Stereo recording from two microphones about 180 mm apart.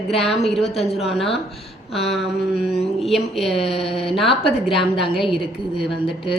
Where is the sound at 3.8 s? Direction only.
30° left (ahead or behind).